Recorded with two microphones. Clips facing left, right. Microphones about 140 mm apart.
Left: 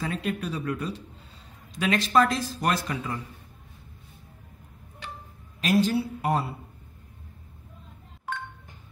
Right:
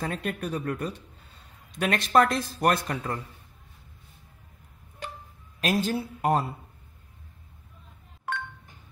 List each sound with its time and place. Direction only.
0.0 s a man's voice: 50° right (ahead or behind)
5.0 s music: 45° right (ahead or behind)
5.6 s a man's voice: 45° right (ahead or behind)